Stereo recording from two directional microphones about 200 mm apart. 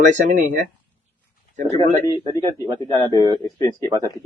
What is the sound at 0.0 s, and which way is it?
Speech, 40° right (ahead or behind).